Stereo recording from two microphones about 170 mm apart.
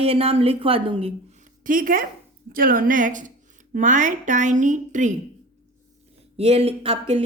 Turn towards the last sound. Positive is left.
turn(degrees=-35)  # may be behind; listen again after turning